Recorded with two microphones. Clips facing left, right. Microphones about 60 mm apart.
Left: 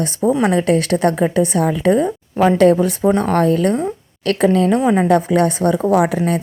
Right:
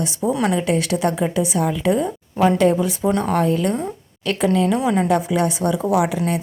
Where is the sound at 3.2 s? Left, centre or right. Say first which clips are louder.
Left 4 dB; left.